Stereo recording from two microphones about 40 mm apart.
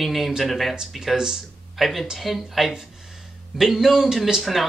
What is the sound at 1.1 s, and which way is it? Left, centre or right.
Speech, centre.